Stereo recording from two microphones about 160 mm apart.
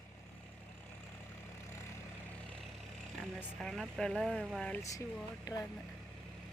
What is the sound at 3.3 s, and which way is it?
Speech, centre (ahead or behind).